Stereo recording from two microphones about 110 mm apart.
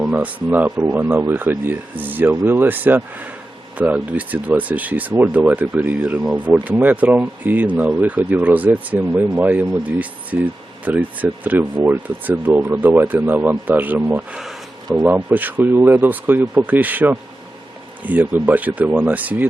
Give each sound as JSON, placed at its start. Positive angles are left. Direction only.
{"t": 0.0, "sound": "speech", "side_deg": -10}